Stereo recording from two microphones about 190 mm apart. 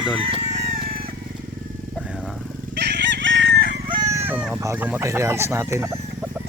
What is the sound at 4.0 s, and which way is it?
Chicken, 15° right (ahead or behind).